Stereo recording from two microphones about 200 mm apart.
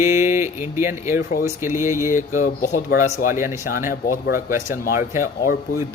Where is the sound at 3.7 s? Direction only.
45° left (ahead or behind).